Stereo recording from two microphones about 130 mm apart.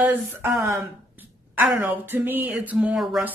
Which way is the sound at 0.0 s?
15° right (ahead or behind).